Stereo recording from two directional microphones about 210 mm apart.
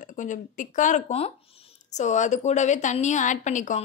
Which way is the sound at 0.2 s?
35° left (ahead or behind).